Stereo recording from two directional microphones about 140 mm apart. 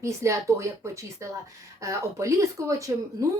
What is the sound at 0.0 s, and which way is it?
A woman's voice, 20° right (ahead or behind).